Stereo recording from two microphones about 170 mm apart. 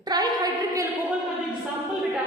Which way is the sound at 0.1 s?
25° right (ahead or behind).